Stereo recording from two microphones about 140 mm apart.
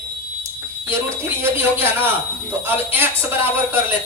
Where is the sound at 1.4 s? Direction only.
15° right (ahead or behind).